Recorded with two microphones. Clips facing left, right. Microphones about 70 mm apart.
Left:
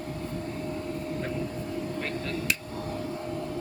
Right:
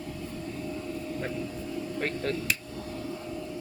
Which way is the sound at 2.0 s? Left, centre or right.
Right.